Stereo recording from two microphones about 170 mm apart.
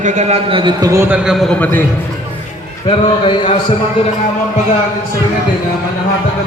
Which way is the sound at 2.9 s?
30° left (ahead or behind).